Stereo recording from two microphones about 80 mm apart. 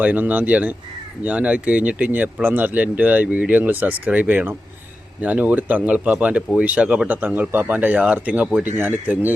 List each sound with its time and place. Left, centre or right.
0.0 s speech: centre